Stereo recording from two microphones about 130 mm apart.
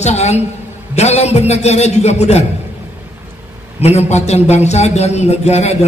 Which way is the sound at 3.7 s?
55° left (ahead or behind).